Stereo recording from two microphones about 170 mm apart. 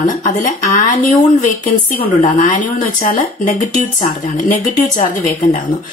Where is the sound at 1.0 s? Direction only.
50° left (ahead or behind).